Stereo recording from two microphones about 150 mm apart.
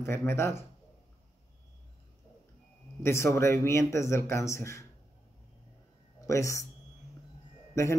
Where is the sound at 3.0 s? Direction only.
20° left (ahead or behind).